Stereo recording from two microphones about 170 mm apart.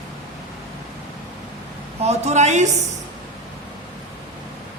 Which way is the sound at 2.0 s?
40° right (ahead or behind).